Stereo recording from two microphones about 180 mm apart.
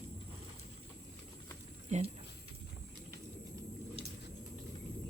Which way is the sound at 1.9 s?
35° right (ahead or behind).